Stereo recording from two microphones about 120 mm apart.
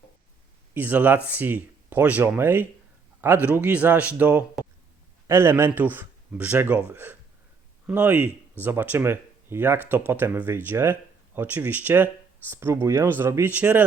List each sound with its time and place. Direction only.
0.7 s speech: 15° right (ahead or behind)